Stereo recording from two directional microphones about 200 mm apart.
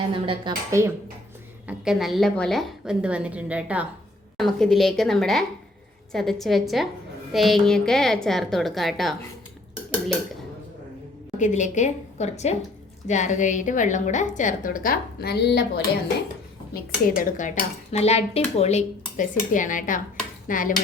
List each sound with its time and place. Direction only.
0.3 s a woman's voice: 20° right (ahead or behind)
1.6 s a woman's voice: 5° right (ahead or behind)
11.3 s dishes: 40° left (ahead or behind); by 15.8 s 55° left (ahead or behind)
16.7 s dishes: 45° left (ahead or behind)